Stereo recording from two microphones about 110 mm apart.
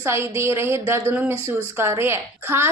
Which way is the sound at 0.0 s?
25° right (ahead or behind).